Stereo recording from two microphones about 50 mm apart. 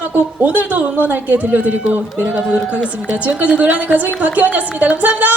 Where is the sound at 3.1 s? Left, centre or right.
Right.